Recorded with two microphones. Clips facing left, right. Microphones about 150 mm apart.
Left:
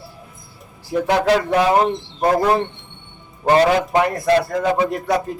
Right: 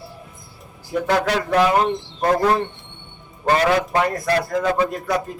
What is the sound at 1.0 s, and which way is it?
Speech, 15° left (ahead or behind).